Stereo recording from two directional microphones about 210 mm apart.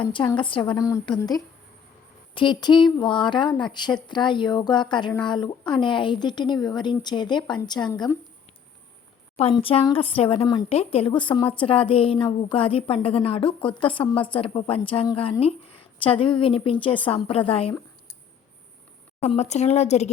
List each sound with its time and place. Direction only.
0.0 s speech: 25° left (ahead or behind)
9.3 s speech: 30° left (ahead or behind)
19.2 s speech: 30° left (ahead or behind)